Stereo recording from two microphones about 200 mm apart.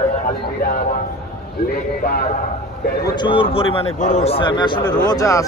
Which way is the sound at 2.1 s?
45° left (ahead or behind).